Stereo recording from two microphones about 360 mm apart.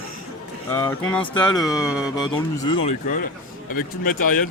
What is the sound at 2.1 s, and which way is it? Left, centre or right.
Speech, centre.